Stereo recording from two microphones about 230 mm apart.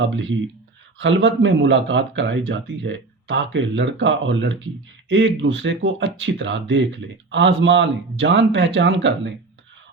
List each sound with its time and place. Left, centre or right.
0.0 s speech: right